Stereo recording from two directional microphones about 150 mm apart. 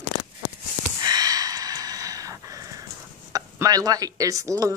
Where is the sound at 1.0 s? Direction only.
25° right (ahead or behind).